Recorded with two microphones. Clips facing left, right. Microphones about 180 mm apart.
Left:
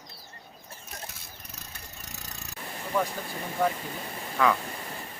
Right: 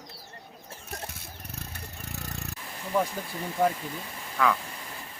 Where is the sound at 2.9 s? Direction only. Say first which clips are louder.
Right 1 dB; 10° right (ahead or behind).